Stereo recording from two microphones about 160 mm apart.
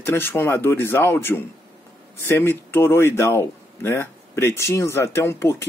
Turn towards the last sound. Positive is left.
turn(degrees=15)  # may be behind; listen again after turning